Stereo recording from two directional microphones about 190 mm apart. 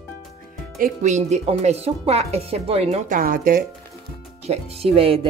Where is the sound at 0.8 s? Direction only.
40° right (ahead or behind).